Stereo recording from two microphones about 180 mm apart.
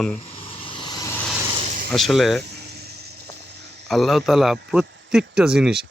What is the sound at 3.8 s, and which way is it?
A man's voice, centre (ahead or behind).